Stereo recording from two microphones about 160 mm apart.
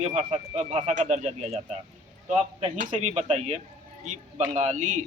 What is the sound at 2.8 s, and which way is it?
Speech, 50° right (ahead or behind).